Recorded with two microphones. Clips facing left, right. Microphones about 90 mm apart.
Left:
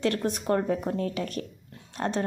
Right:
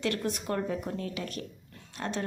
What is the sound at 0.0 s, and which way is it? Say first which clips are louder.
Speech: left 4 dB; 35° left (ahead or behind).